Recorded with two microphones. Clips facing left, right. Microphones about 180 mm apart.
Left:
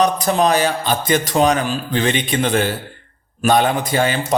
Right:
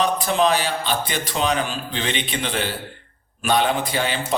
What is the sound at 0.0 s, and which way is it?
A man's voice, 45° left (ahead or behind).